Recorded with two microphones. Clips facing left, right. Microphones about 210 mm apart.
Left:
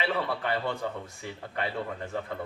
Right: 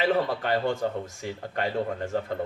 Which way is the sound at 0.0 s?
45° right (ahead or behind).